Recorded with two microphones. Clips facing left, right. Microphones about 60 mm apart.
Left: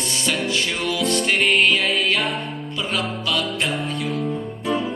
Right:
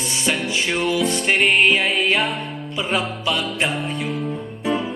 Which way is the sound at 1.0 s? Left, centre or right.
Centre.